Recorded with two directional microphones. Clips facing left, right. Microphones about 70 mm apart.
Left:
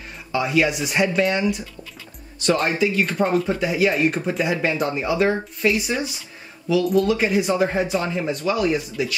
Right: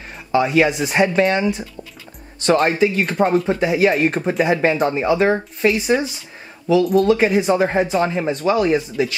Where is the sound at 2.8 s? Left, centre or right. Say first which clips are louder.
Right 3 dB; right.